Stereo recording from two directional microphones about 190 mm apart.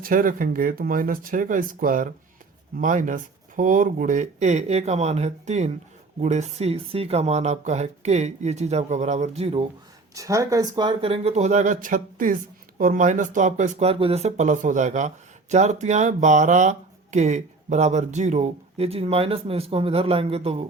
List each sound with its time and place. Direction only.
0.0 s speech: 45° right (ahead or behind); by 9.6 s 30° right (ahead or behind)
10.2 s speech: 15° right (ahead or behind); by 20.7 s 30° right (ahead or behind)